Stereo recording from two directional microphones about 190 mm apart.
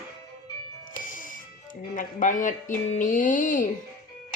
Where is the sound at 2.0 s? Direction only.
40° left (ahead or behind).